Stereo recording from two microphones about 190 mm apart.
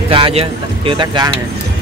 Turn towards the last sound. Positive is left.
turn(degrees=-25)  # may be behind; listen again after turning